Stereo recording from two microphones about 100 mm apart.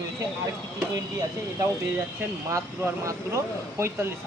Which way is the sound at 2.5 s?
30° right (ahead or behind).